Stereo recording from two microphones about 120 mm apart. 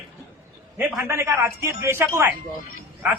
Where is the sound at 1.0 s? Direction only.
25° right (ahead or behind).